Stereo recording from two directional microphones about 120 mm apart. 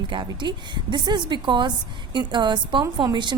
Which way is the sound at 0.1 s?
40° right (ahead or behind).